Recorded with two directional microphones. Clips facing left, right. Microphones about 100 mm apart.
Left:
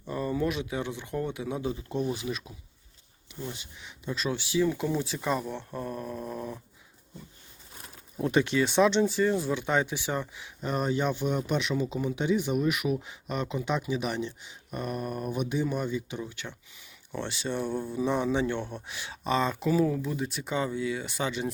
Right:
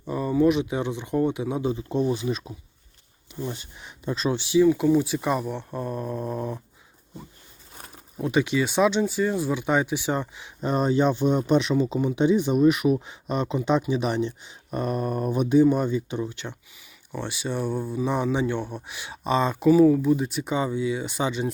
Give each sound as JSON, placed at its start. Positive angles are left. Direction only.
{"t": 0.0, "sound": "speech", "side_deg": -15}
{"t": 3.5, "sound": "speech", "side_deg": -40}
{"t": 4.6, "sound": "speech", "side_deg": -10}
{"t": 8.2, "sound": "speech", "side_deg": -5}
{"t": 17.1, "sound": "speech", "side_deg": -10}
{"t": 20.1, "sound": "speech", "side_deg": -20}